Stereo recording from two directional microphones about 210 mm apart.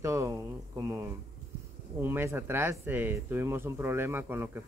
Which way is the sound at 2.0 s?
10° right (ahead or behind).